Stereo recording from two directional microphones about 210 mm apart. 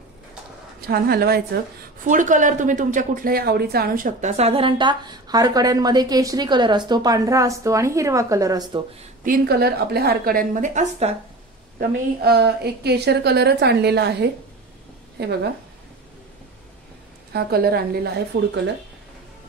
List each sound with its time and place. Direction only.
0.7 s a woman's voice: 45° right (ahead or behind)
2.0 s speech: 35° right (ahead or behind); by 8.8 s 20° right (ahead or behind)
9.2 s a woman's voice: 45° right (ahead or behind)
12.2 s a woman's voice: 50° right (ahead or behind)
17.3 s a woman's voice: 50° right (ahead or behind)